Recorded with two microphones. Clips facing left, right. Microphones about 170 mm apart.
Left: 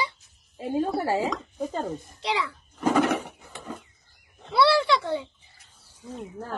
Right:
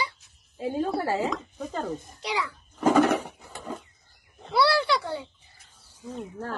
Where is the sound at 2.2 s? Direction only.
25° left (ahead or behind).